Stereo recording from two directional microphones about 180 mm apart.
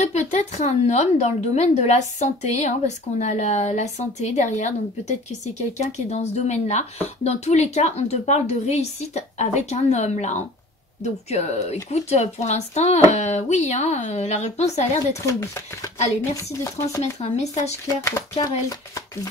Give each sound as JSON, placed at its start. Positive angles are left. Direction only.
{"t": 0.1, "sound": "a woman's voice", "side_deg": 40}
{"t": 15.1, "sound": "speech", "side_deg": 15}
{"t": 17.0, "sound": "a woman's voice", "side_deg": 35}
{"t": 17.8, "sound": "speech", "side_deg": 15}